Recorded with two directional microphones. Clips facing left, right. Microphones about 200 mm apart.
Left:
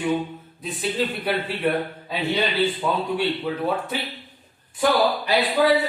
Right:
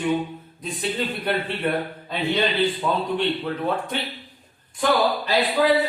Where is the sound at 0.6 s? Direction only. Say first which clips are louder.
Left 1 dB; centre (ahead or behind).